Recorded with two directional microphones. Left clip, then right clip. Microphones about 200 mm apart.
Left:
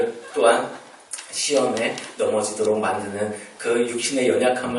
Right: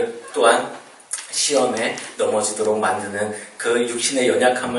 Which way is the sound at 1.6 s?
10° left (ahead or behind).